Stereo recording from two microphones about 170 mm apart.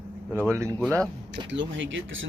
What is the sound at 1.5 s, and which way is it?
Speech, 90° right.